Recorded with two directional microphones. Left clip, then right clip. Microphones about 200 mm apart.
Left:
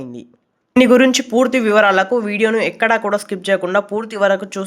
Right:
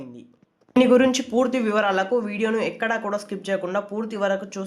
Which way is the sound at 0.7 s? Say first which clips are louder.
Left 6 dB; 25° left (ahead or behind).